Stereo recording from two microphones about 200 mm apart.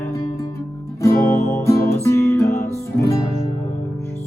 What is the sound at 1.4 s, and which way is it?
Music, 35° left (ahead or behind).